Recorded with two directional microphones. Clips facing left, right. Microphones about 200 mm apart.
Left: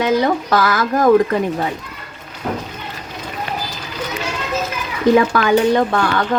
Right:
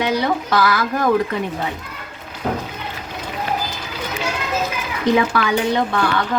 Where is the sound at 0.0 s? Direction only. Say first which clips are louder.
Left 4 dB; 45° left (ahead or behind).